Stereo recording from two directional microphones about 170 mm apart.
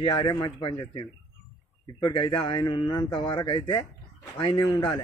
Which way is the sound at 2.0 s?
30° left (ahead or behind).